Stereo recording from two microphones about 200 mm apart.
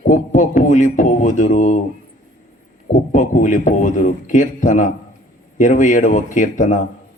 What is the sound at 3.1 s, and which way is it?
A man's voice, 40° left (ahead or behind).